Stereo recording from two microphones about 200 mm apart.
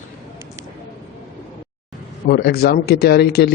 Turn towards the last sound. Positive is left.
turn(degrees=55)  # may be behind; listen again after turning